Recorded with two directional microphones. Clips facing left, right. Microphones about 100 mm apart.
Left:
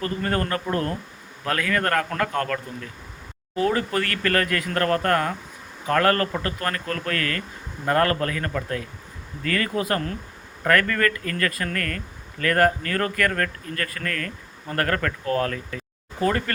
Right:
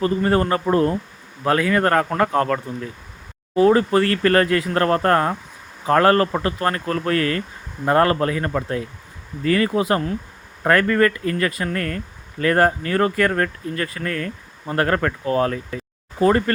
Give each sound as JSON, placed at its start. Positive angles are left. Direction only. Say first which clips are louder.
{"t": 0.0, "sound": "speech", "louder": "right 7 dB", "side_deg": -25}